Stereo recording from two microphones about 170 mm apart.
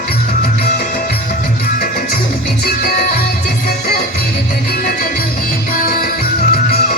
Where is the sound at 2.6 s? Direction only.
55° left (ahead or behind).